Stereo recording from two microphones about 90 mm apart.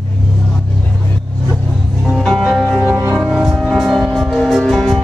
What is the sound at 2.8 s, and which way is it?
Music, 30° right (ahead or behind).